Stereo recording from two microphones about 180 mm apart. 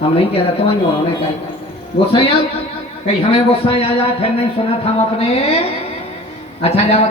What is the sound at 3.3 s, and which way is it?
Speech, 30° left (ahead or behind).